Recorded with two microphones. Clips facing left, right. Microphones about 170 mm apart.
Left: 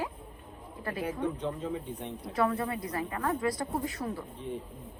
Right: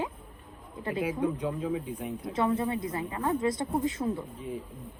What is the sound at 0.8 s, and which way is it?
Speech, 10° right (ahead or behind).